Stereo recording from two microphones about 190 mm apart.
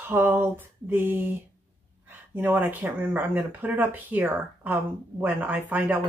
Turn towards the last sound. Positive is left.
turn(degrees=-10)  # may be behind; listen again after turning